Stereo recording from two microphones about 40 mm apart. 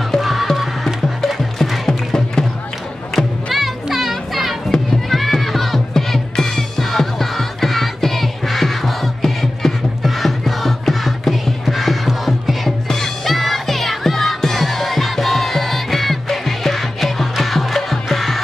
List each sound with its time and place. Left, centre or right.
0.2 s music: centre
0.8 s music: centre
1.9 s music: centre
3.5 s children playing: centre
5.1 s music: centre